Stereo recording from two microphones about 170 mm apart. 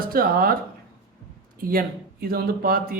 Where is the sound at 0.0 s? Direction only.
60° right (ahead or behind).